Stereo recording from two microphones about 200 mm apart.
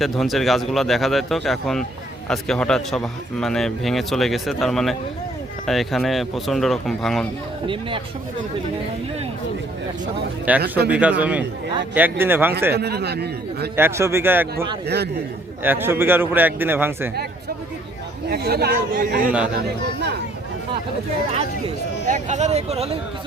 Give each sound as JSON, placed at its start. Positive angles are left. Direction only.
{"t": 0.0, "sound": "a man's voice", "side_deg": 0}
{"t": 7.7, "sound": "speech", "side_deg": -25}
{"t": 10.5, "sound": "a man's voice", "side_deg": -5}
{"t": 12.7, "sound": "a man's voice", "side_deg": -55}
{"t": 13.7, "sound": "a man's voice", "side_deg": -10}
{"t": 14.8, "sound": "a man's voice", "side_deg": -55}
{"t": 15.6, "sound": "a man's voice", "side_deg": -10}
{"t": 18.3, "sound": "speech", "side_deg": -50}
{"t": 22.1, "sound": "speech", "side_deg": -35}